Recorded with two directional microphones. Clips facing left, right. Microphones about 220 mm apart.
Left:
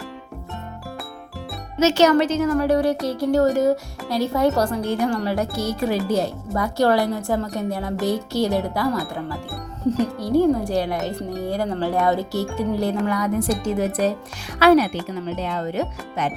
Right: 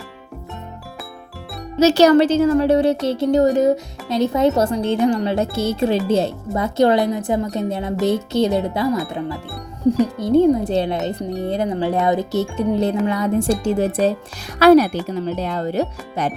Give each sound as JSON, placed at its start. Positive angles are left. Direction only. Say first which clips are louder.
{"t": 1.8, "sound": "speech", "louder": "right 4 dB", "side_deg": -35}
{"t": 10.2, "sound": "speech", "louder": "right 2 dB", "side_deg": -20}
{"t": 14.0, "sound": "speech", "louder": "right 3 dB", "side_deg": 0}
{"t": 14.6, "sound": "speech", "louder": "right 4 dB", "side_deg": -40}